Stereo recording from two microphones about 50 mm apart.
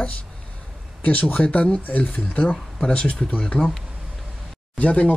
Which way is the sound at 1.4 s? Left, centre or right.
Left.